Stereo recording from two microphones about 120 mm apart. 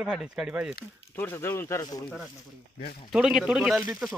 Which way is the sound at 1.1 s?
20° left (ahead or behind).